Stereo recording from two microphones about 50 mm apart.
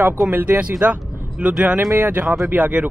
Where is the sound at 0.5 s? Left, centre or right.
Right.